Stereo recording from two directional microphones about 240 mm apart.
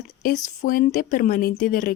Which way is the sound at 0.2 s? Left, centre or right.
Left.